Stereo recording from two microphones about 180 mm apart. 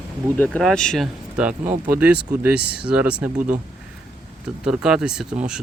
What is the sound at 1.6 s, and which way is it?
Speech, 45° right (ahead or behind).